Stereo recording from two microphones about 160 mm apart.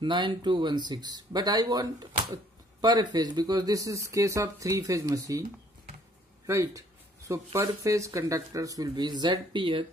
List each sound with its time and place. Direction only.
0.0 s speech: 30° right (ahead or behind)
6.4 s speech: 20° right (ahead or behind)